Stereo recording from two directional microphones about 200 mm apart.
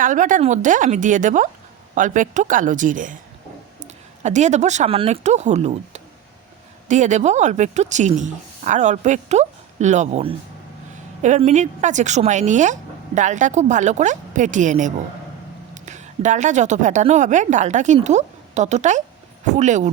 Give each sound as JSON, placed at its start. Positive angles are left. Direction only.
{"t": 0.0, "sound": "a woman's voice", "side_deg": -40}
{"t": 4.2, "sound": "a woman's voice", "side_deg": -35}